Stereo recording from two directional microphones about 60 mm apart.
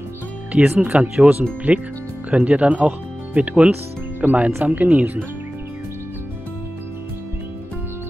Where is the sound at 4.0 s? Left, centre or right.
Right.